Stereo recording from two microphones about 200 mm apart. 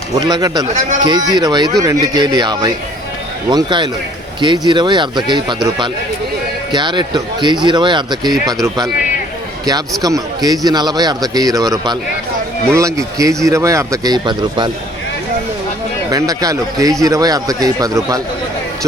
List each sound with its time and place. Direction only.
0.2 s a man's voice: 20° right (ahead or behind)
6.7 s a man's voice: 20° right (ahead or behind)
8.3 s speech: centre (ahead or behind)
8.6 s a man's voice: 20° right (ahead or behind)
10.0 s a man's voice: 20° right (ahead or behind)
16.0 s speech: 20° right (ahead or behind)